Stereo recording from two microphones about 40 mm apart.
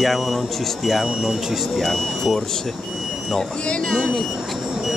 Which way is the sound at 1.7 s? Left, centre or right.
Centre.